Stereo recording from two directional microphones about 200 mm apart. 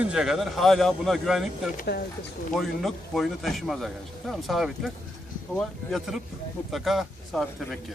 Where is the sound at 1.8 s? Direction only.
50° left (ahead or behind).